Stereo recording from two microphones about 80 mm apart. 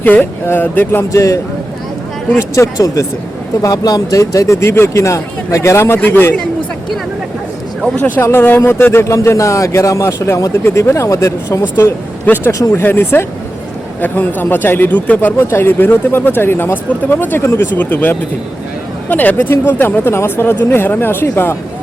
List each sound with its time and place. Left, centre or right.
0.0 s speech: left
2.4 s speech: left
7.9 s speech: left
12.2 s speech: left
12.5 s speech: left